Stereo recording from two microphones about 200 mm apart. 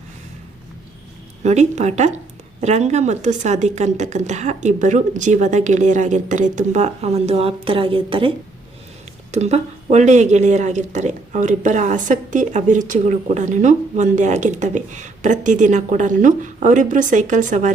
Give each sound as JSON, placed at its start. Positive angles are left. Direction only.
{"t": 1.5, "sound": "speech", "side_deg": -35}
{"t": 9.3, "sound": "speech", "side_deg": -35}